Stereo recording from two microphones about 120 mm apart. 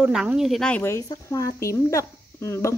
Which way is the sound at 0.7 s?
20° left (ahead or behind).